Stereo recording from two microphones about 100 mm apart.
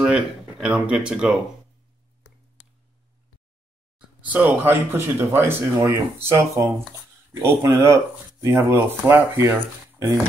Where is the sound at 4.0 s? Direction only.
15° right (ahead or behind).